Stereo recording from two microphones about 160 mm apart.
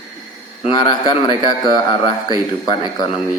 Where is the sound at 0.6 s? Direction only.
30° left (ahead or behind).